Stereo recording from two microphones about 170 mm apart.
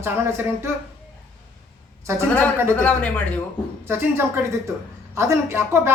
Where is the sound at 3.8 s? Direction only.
15° right (ahead or behind).